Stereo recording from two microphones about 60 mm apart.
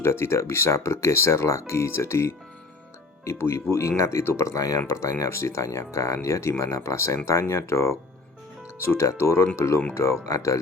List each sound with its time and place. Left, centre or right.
0.0 s speech: left
4.9 s speech: left